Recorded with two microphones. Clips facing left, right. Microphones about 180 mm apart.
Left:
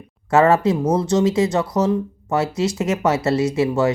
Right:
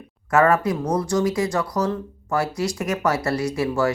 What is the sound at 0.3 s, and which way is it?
Speech, 25° left (ahead or behind).